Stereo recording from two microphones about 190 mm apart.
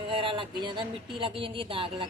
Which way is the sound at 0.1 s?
25° right (ahead or behind).